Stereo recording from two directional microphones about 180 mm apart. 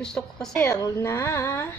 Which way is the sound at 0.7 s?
20° left (ahead or behind).